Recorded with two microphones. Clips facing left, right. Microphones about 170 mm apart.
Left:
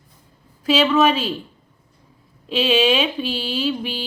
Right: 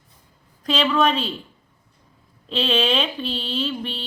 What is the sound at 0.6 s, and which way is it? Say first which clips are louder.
Speech: left 4 dB; 5° left (ahead or behind).